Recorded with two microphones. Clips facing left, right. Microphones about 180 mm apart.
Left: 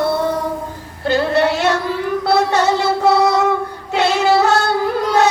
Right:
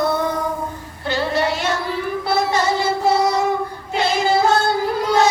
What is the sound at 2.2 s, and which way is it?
Child singing, 70° left (ahead or behind).